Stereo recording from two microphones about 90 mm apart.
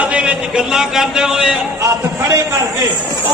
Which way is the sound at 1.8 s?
40° right (ahead or behind).